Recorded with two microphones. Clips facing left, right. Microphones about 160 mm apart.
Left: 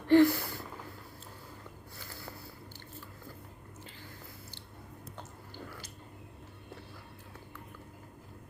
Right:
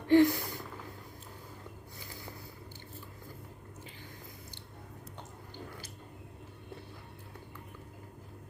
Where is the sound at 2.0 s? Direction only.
15° right (ahead or behind).